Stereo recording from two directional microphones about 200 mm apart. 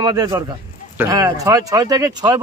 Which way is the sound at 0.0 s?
20° right (ahead or behind).